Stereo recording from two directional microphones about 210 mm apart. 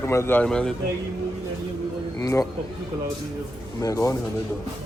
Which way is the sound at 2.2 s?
15° left (ahead or behind).